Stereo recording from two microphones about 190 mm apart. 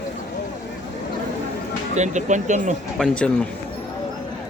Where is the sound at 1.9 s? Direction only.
40° right (ahead or behind).